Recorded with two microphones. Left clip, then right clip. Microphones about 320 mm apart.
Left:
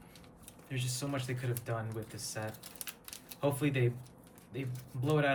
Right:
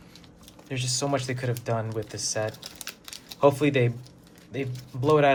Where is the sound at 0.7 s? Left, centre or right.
Centre.